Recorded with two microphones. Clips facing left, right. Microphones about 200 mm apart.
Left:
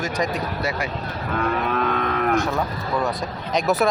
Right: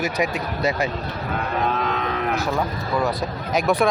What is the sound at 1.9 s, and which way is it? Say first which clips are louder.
Cattle: left 2 dB; 55° left (ahead or behind).